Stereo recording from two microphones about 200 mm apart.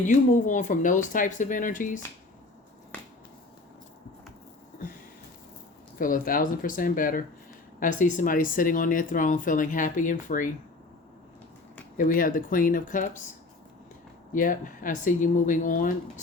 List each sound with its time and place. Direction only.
0.0 s speech: 40° left (ahead or behind)
6.0 s speech: 45° left (ahead or behind)
11.9 s speech: 45° left (ahead or behind)
14.3 s speech: 40° left (ahead or behind)